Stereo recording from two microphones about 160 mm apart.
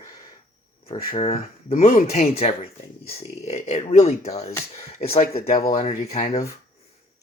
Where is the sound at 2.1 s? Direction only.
45° left (ahead or behind).